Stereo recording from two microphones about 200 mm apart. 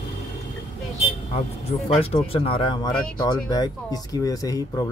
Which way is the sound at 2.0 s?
30° left (ahead or behind).